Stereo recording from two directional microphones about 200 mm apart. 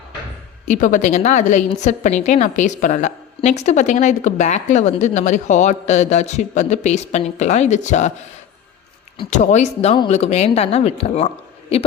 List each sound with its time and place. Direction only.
0.7 s a woman's voice: 40° left (ahead or behind)
9.3 s a woman's voice: 35° left (ahead or behind)